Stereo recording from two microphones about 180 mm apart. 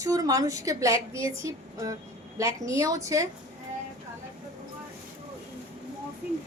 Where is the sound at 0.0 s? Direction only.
20° right (ahead or behind).